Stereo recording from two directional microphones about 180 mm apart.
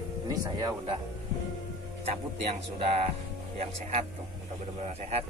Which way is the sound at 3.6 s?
40° right (ahead or behind).